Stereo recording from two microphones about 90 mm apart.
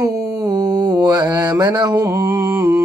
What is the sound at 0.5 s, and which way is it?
Mantra, 45° right (ahead or behind).